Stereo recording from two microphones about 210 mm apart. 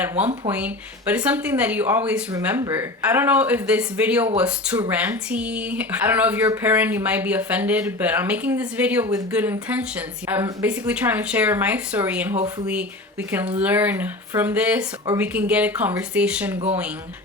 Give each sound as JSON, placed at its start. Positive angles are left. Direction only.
{"t": 0.0, "sound": "speech", "side_deg": -10}
{"t": 13.6, "sound": "speech", "side_deg": -5}